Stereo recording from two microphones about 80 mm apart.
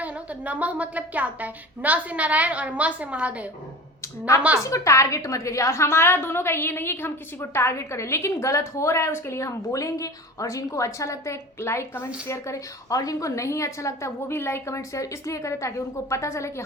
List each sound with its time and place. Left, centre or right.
0.0 s a woman's voice: centre
4.6 s a woman's voice: left